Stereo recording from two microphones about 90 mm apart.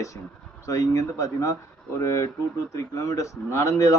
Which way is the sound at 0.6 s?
35° left (ahead or behind).